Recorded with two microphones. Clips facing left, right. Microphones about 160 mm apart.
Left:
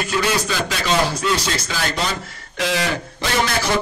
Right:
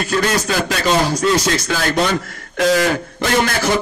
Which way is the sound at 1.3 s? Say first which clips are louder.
Right 6 dB; 50° right (ahead or behind).